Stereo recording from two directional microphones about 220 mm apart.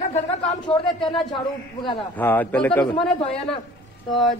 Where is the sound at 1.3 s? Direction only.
20° left (ahead or behind).